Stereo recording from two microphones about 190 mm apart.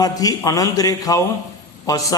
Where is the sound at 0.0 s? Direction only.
20° left (ahead or behind).